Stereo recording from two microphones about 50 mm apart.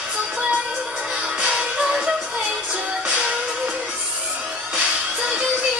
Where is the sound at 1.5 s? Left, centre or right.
Centre.